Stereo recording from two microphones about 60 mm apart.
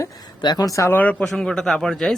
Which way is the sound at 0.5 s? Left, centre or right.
Left.